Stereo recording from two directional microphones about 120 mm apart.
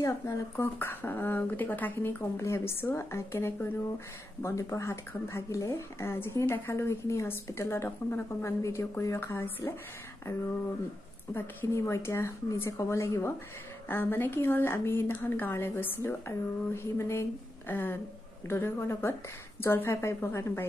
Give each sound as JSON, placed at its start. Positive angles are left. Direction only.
{"t": 0.0, "sound": "speech", "side_deg": 20}
{"t": 11.3, "sound": "speech", "side_deg": 20}